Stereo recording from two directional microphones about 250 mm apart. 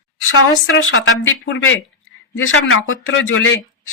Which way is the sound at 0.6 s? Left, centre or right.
Left.